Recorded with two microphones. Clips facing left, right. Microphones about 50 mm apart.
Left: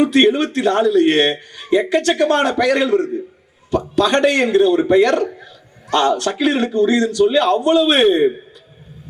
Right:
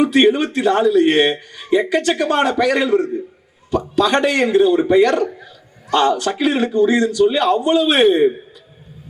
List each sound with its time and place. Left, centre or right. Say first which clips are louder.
0.1 s a man's voice: even; centre